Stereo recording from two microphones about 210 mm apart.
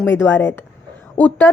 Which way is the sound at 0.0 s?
10° left (ahead or behind).